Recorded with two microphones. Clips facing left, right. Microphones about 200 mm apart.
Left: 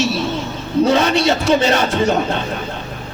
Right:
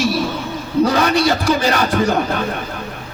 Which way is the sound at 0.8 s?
25° left (ahead or behind).